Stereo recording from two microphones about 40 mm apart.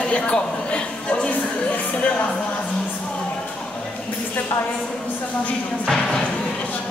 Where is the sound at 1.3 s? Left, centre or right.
Left.